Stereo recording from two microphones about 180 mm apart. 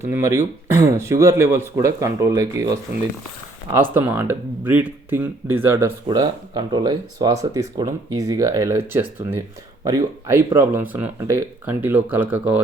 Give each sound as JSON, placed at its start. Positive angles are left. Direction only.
{"t": 0.1, "sound": "speech", "side_deg": -15}
{"t": 6.1, "sound": "speech", "side_deg": -25}